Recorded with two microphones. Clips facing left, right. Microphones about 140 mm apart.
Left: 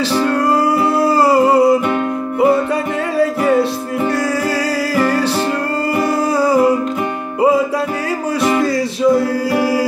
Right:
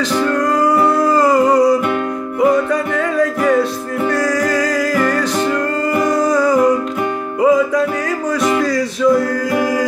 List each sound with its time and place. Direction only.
0.1 s music: 10° left (ahead or behind)
0.4 s music: 30° left (ahead or behind)
6.1 s music: 30° left (ahead or behind)
9.5 s music: 10° left (ahead or behind)